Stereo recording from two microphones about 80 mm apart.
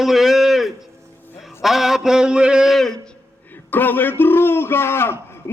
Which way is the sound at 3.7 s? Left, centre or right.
Left.